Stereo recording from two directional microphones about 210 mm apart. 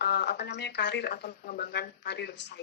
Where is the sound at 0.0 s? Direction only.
50° left (ahead or behind).